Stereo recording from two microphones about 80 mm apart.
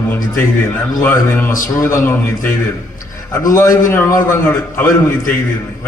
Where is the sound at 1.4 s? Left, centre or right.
Left.